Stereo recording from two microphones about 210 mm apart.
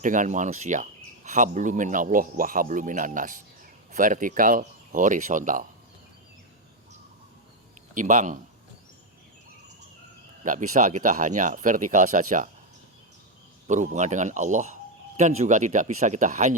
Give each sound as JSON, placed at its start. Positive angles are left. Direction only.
{"t": 0.0, "sound": "speech", "side_deg": -40}
{"t": 7.9, "sound": "speech", "side_deg": -35}
{"t": 10.4, "sound": "speech", "side_deg": -40}
{"t": 13.7, "sound": "speech", "side_deg": -35}